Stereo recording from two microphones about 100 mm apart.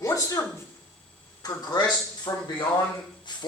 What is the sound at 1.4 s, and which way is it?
Speech, 40° left (ahead or behind).